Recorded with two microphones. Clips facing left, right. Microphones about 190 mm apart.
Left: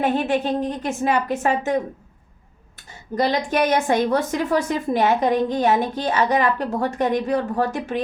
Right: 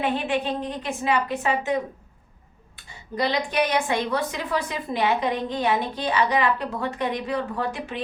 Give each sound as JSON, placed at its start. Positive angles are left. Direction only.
{"t": 0.0, "sound": "a woman's voice", "side_deg": 45}
{"t": 3.2, "sound": "a woman's voice", "side_deg": 45}